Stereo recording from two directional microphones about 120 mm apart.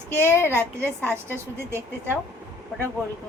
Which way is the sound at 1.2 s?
20° right (ahead or behind).